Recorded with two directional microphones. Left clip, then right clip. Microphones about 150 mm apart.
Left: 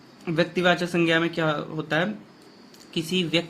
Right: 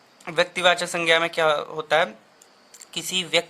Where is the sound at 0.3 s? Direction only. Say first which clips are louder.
Right 2 dB; 45° right (ahead or behind).